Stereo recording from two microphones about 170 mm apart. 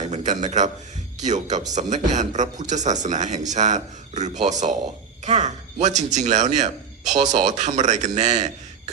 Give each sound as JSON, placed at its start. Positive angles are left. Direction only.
{"t": 0.1, "sound": "a man's voice", "side_deg": -45}
{"t": 5.2, "sound": "frog", "side_deg": -45}
{"t": 6.1, "sound": "speech", "side_deg": -45}